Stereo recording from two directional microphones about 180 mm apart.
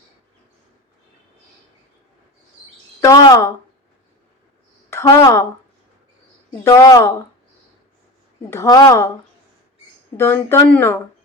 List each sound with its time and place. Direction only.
3.0 s speech: 20° left (ahead or behind)
4.9 s a woman's voice: 15° left (ahead or behind)
6.7 s speech: 15° left (ahead or behind)
8.4 s speech: 15° left (ahead or behind)
10.2 s speech: 15° left (ahead or behind)